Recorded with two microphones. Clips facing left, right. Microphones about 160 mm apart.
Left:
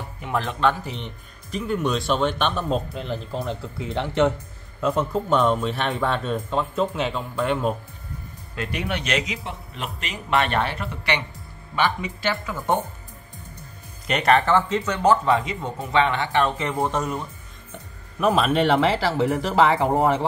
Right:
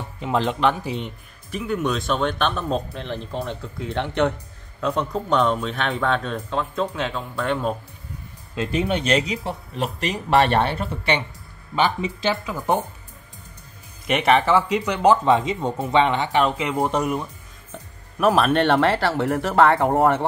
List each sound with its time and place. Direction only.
0.2 s speech: 20° right (ahead or behind)
1.7 s speech: centre (ahead or behind)
8.5 s speech: 25° right (ahead or behind)
14.0 s speech: 5° right (ahead or behind)
19.3 s speech: centre (ahead or behind)